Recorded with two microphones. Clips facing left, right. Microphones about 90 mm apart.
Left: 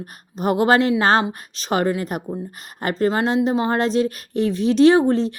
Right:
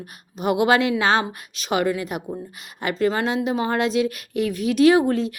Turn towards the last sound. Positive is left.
turn(degrees=30)  # may be behind; listen again after turning